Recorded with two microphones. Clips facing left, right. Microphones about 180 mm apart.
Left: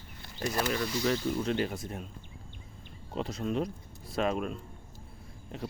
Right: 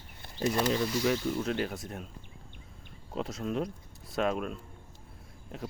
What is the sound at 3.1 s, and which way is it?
Speech, centre (ahead or behind).